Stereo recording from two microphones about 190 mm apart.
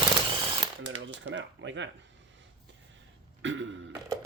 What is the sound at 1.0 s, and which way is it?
Speech, 80° right.